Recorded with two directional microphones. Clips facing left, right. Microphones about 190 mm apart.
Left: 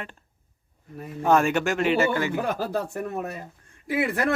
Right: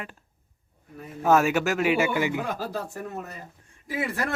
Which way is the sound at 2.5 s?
60° left (ahead or behind).